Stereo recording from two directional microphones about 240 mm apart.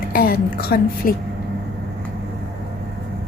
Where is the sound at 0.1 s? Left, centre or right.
Left.